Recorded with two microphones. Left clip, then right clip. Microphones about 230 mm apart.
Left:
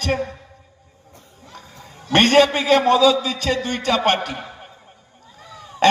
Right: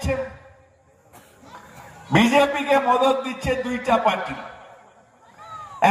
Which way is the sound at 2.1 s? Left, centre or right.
Right.